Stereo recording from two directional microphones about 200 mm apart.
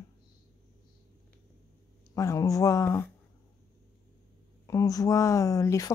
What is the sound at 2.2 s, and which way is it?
Speech, 15° left (ahead or behind).